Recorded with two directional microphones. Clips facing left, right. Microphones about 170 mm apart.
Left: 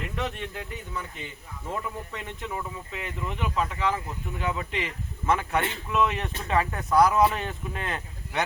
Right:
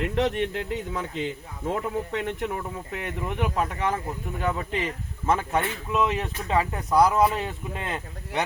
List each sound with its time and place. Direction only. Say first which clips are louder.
0.2 s speech: right 8 dB; 90° right; by 2.5 s 70° right (ahead or behind)
2.9 s speech: right 4 dB; 55° right (ahead or behind); by 5.3 s 40° right (ahead or behind)
5.3 s speech: right 1 dB; 25° right (ahead or behind)